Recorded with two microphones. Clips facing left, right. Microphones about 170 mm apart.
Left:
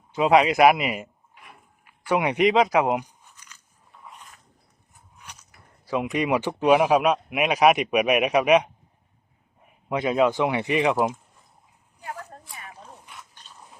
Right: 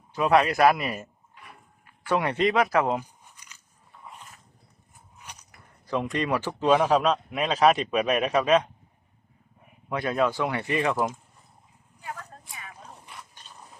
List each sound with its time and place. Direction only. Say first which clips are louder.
0.1 s speech: left 3 dB; 20° left (ahead or behind)
4.0 s dog: right 1 dB; centre (ahead or behind)
5.8 s speech: left 2 dB; 10° left (ahead or behind)
9.9 s speech: left 4 dB; 20° left (ahead or behind)